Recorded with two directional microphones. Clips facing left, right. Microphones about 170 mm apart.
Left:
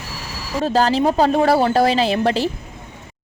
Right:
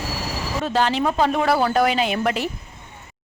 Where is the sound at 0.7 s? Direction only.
35° left (ahead or behind).